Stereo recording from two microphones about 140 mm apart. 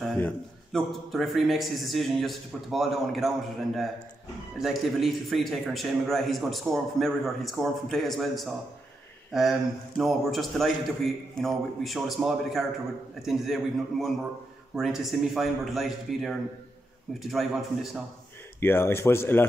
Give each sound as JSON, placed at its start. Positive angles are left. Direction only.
{"t": 0.7, "sound": "a man's voice", "side_deg": 0}
{"t": 18.6, "sound": "speech", "side_deg": 15}